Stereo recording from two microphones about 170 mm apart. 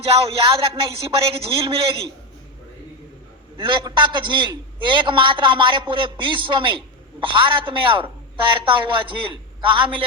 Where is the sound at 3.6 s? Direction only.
25° right (ahead or behind).